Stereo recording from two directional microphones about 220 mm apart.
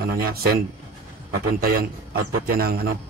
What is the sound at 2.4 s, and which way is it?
Speech, 45° right (ahead or behind).